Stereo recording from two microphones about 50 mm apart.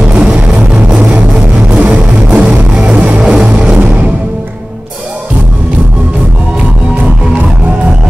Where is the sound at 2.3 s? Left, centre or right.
Right.